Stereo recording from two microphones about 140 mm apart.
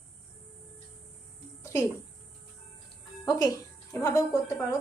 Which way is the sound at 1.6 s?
20° left (ahead or behind).